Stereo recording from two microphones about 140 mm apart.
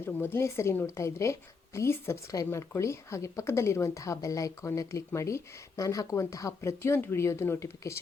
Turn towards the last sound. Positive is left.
turn(degrees=20)  # may be behind; listen again after turning